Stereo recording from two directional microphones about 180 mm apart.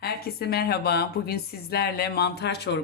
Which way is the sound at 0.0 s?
60° left (ahead or behind).